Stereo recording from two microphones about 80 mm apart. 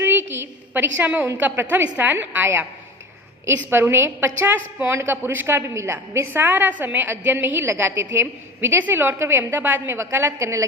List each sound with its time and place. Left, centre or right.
0.0 s a sound: right
1.4 s a woman's voice: right
10.3 s a woman's voice: right